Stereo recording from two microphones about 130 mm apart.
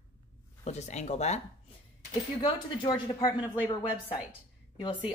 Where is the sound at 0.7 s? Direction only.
60° left (ahead or behind).